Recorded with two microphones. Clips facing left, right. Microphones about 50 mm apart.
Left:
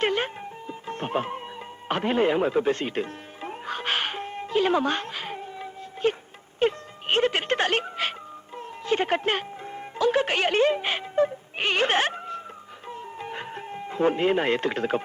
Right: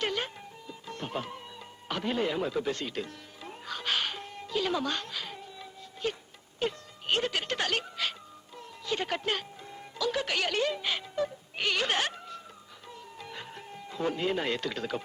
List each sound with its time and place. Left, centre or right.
0.0 s music: left
6.6 s speech: left
12.9 s music: left